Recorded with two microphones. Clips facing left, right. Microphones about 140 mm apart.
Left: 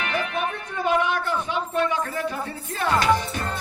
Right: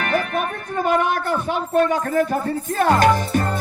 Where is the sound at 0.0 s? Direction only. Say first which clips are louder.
Right 4 dB; 45° right (ahead or behind).